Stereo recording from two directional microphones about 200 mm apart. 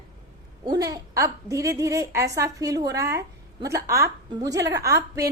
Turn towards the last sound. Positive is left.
turn(degrees=-15)  # may be behind; listen again after turning